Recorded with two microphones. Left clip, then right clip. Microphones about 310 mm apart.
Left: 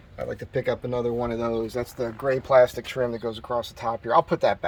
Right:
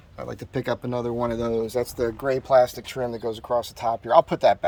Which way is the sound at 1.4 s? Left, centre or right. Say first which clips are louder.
Right 1 dB; right.